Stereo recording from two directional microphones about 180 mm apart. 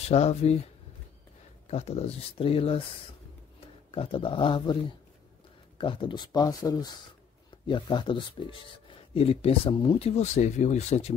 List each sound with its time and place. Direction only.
0.1 s speech: 35° left (ahead or behind)
1.7 s speech: 35° left (ahead or behind)
3.9 s speech: 30° left (ahead or behind)
5.8 s speech: 25° left (ahead or behind)